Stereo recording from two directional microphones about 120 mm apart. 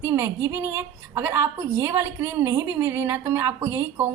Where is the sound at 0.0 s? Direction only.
20° right (ahead or behind).